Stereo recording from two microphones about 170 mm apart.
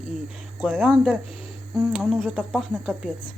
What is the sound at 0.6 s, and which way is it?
Speech, 10° right (ahead or behind).